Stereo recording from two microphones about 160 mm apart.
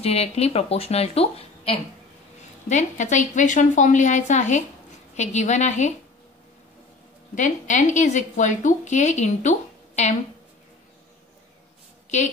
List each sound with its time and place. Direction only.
0.0 s speech: 40° left (ahead or behind)
2.7 s a woman's voice: 50° left (ahead or behind)
7.3 s a woman's voice: 50° left (ahead or behind)